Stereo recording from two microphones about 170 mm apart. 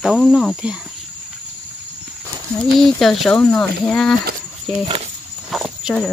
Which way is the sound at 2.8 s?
Centre (ahead or behind).